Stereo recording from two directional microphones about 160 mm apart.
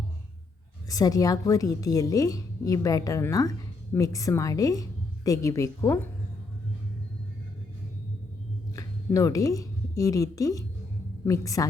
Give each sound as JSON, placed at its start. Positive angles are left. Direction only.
{"t": 0.9, "sound": "a woman's voice", "side_deg": 20}
{"t": 8.7, "sound": "a woman's voice", "side_deg": 20}